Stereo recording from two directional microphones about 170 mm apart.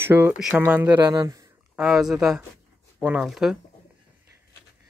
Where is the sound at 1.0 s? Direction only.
20° right (ahead or behind).